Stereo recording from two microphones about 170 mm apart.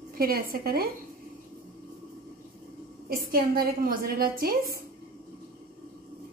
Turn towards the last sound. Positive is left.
turn(degrees=-60)  # may be behind; listen again after turning